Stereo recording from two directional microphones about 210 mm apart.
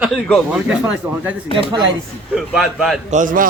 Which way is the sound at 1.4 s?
25° left (ahead or behind).